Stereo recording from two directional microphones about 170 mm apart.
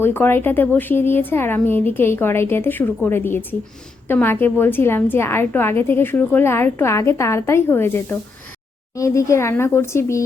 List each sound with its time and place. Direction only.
0.0 s a woman's voice: 15° left (ahead or behind)